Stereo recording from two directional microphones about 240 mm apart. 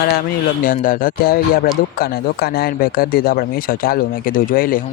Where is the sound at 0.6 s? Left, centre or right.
Left.